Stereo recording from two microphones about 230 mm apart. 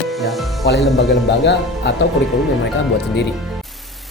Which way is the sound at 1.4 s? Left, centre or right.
Left.